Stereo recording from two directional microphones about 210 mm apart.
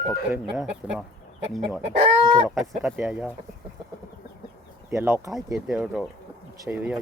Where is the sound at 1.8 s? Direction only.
30° right (ahead or behind).